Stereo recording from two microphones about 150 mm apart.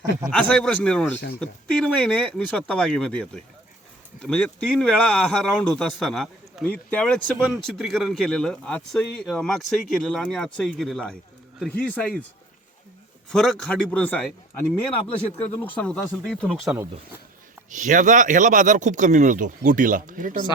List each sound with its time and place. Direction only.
0.3 s a man's voice: 5° left (ahead or behind)
13.3 s a man's voice: centre (ahead or behind)
15.6 s a man's voice: 10° left (ahead or behind)
17.7 s speech: 60° right (ahead or behind)